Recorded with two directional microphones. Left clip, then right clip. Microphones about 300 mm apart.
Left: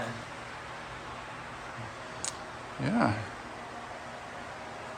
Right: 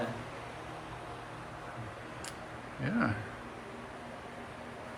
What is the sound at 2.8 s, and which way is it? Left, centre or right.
Speech, centre.